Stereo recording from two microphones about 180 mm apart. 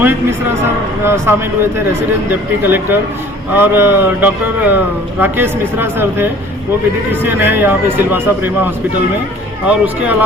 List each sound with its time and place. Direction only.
0.0 s speech: 10° right (ahead or behind)
2.6 s speech: 10° right (ahead or behind)
7.3 s speech: 10° right (ahead or behind)
9.8 s speech: 10° right (ahead or behind)